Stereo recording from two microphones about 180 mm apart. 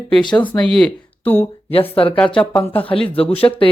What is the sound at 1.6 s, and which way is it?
Speech, 30° left (ahead or behind).